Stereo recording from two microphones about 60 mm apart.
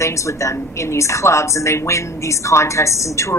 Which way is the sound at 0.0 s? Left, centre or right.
Left.